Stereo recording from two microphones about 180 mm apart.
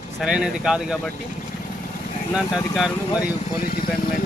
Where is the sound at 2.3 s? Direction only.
5° right (ahead or behind).